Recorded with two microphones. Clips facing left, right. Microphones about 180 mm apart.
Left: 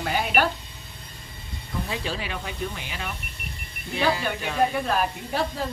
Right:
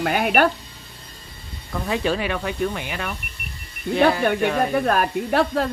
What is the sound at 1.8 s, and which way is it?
Speech, 60° right (ahead or behind).